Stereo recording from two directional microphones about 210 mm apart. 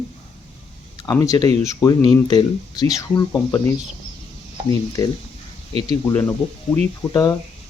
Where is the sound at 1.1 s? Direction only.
15° left (ahead or behind).